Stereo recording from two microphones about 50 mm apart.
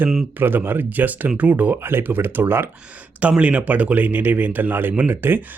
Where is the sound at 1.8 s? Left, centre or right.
Right.